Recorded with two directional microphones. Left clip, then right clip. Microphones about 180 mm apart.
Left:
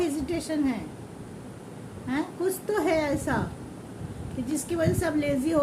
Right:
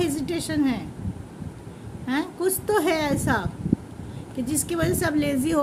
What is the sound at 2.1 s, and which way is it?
A woman's voice, 50° right (ahead or behind).